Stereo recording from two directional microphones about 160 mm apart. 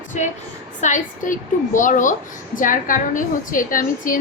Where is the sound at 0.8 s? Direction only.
50° left (ahead or behind).